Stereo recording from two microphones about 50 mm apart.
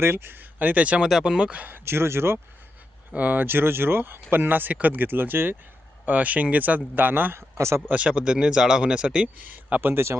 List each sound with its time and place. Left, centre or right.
0.0 s speech: right
0.6 s speech: right
1.0 s speech: centre
1.3 s speech: right
1.6 s speech: right
3.1 s speech: right
3.4 s speech: right
6.1 s speech: right
7.9 s speech: right
9.4 s speech: right
9.8 s speech: right